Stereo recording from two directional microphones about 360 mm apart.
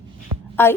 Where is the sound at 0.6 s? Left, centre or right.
Centre.